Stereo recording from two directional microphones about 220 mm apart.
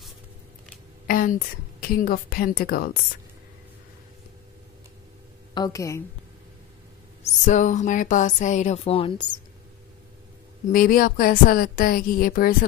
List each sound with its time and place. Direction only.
1.0 s a sound: 40° left (ahead or behind)
1.8 s speech: 40° left (ahead or behind)
5.5 s a woman's voice: 15° left (ahead or behind)
7.4 s speech: 35° left (ahead or behind)
10.7 s speech: 40° left (ahead or behind)